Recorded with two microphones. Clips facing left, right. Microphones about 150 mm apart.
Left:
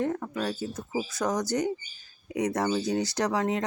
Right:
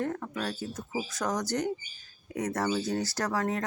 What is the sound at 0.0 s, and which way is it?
Speech, 10° left (ahead or behind).